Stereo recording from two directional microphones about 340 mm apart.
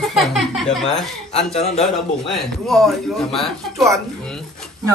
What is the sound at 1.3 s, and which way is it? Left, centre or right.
Speech, centre.